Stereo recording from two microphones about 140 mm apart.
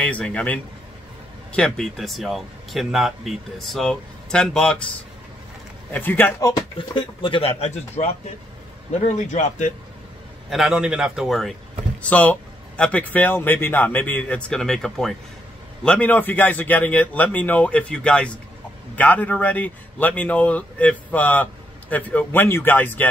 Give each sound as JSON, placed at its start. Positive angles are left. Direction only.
{"t": 0.0, "sound": "a man's voice", "side_deg": 10}
{"t": 5.9, "sound": "a man's voice", "side_deg": 15}
{"t": 6.5, "sound": "speech", "side_deg": 30}
{"t": 8.9, "sound": "a man's voice", "side_deg": 60}
{"t": 10.5, "sound": "a man's voice", "side_deg": -5}